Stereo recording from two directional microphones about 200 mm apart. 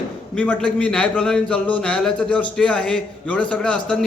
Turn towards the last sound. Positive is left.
turn(degrees=5)  # may be behind; listen again after turning